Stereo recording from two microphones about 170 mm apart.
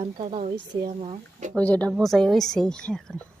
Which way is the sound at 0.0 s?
40° right (ahead or behind).